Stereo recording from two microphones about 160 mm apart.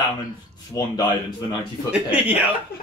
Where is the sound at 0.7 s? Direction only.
20° left (ahead or behind).